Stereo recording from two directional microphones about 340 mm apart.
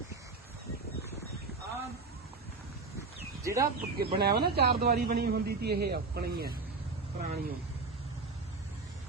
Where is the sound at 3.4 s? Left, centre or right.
Centre.